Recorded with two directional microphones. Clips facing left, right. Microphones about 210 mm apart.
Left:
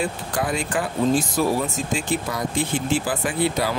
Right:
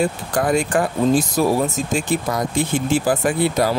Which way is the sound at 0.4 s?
45° right (ahead or behind).